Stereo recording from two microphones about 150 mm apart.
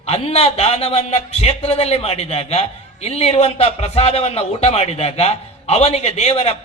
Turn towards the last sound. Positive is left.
turn(degrees=45)  # may be behind; listen again after turning